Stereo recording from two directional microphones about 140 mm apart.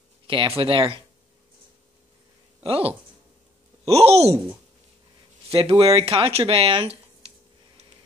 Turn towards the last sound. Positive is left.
turn(degrees=-40)  # may be behind; listen again after turning